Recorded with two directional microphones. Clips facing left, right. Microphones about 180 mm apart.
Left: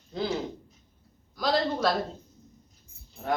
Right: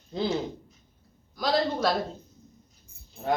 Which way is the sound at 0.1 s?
25° right (ahead or behind).